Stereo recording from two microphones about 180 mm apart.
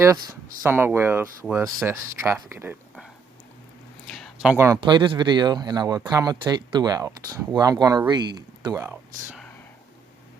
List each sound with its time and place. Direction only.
0.6 s speech: 15° right (ahead or behind)
4.1 s a sound: centre (ahead or behind)
4.5 s speech: 15° right (ahead or behind)
4.8 s speech: 25° right (ahead or behind)